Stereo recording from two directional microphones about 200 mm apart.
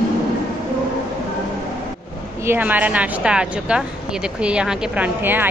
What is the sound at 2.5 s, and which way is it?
Speech, 10° right (ahead or behind).